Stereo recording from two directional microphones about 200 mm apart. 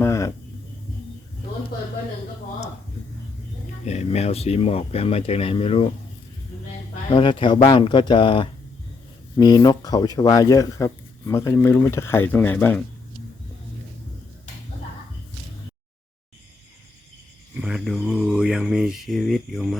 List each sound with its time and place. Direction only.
0.0 s a sound: 15° left (ahead or behind)
3.8 s speech: 35° left (ahead or behind)
7.1 s speech: 25° left (ahead or behind)
17.6 s speech: 5° right (ahead or behind)